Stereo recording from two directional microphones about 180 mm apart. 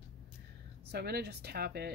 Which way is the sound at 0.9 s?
60° right (ahead or behind).